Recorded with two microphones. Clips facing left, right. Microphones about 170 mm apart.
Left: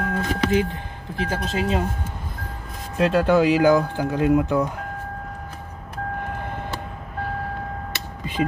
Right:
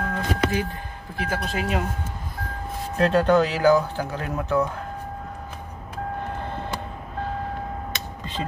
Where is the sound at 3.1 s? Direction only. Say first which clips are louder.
Left 2 dB; 5° left (ahead or behind).